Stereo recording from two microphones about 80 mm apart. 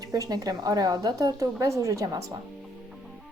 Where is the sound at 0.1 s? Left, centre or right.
Right.